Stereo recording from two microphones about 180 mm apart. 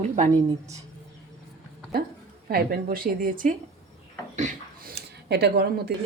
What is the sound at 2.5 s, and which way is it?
Speech, 55° right (ahead or behind).